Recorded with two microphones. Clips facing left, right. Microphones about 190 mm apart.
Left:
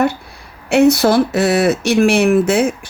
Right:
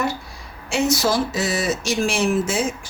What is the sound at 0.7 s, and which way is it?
Speech, 60° left (ahead or behind).